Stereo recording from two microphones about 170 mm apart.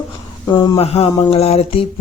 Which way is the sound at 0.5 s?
25° left (ahead or behind).